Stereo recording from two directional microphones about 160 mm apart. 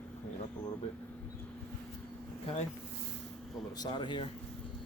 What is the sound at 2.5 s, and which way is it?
Speech, 35° left (ahead or behind).